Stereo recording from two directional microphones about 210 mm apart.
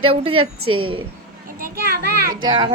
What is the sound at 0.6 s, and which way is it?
Speech, 90° right.